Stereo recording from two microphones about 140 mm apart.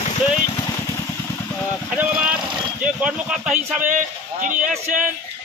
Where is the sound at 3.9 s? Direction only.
70° right (ahead or behind).